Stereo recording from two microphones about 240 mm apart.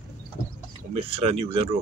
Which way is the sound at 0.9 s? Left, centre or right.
Right.